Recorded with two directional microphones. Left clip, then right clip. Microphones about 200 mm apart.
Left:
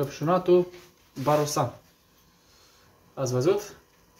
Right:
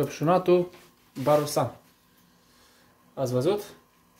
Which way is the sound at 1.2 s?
15° right (ahead or behind).